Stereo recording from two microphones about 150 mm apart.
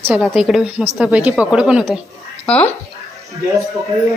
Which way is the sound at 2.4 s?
10° left (ahead or behind).